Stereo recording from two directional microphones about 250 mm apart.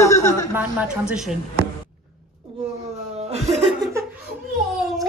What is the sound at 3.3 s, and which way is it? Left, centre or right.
Speech, right.